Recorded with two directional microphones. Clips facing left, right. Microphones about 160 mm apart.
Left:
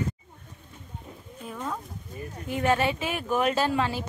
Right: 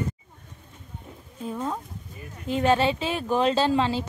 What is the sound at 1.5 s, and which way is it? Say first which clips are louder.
A woman's voice: right 4 dB; 25° right (ahead or behind).